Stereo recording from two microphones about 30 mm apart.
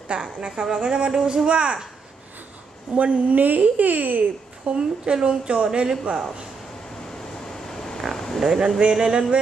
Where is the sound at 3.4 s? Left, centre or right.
Right.